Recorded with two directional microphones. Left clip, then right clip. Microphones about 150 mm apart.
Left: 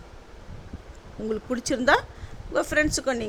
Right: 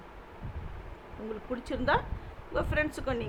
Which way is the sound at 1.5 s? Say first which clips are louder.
Left 7 dB; 60° left (ahead or behind).